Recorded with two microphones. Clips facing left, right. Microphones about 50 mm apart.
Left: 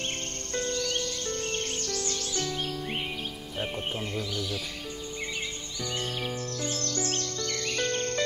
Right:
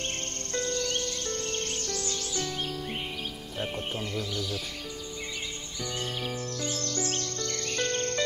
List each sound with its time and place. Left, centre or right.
0.8 s music: centre
6.8 s bird vocalization: right
7.7 s cricket: centre